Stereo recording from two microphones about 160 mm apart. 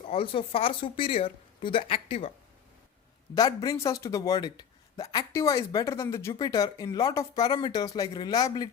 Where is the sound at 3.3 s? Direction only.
25° left (ahead or behind).